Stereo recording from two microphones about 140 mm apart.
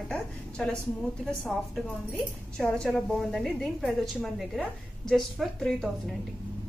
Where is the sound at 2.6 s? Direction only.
5° left (ahead or behind).